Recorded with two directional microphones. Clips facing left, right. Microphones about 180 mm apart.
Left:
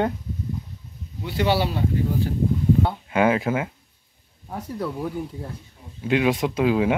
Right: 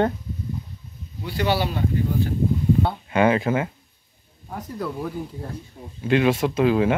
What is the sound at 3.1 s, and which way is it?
Speech, 5° left (ahead or behind).